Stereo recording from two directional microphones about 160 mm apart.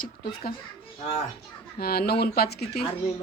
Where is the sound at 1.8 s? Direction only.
75° left (ahead or behind).